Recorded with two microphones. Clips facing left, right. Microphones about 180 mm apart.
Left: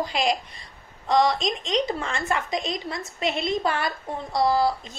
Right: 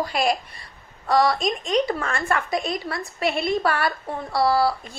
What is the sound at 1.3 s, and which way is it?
Speech, 55° right (ahead or behind).